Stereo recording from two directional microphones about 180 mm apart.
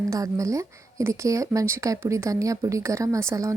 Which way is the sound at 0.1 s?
20° right (ahead or behind).